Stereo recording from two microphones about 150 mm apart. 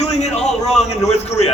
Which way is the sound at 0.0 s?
45° left (ahead or behind).